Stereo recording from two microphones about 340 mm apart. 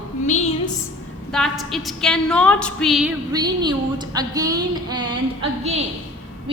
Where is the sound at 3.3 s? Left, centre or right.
Centre.